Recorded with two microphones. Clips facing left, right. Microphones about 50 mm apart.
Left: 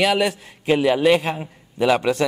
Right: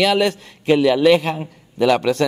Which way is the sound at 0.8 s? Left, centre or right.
Centre.